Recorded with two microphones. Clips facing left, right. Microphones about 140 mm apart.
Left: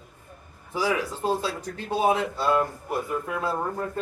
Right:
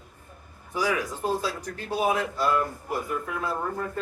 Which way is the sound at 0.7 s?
25° left (ahead or behind).